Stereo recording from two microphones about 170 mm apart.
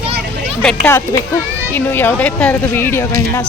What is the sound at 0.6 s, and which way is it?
Speech, 5° left (ahead or behind).